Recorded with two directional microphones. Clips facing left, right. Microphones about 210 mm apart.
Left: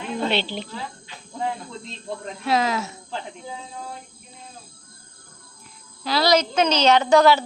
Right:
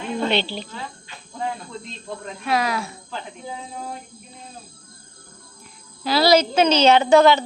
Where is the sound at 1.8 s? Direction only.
25° left (ahead or behind).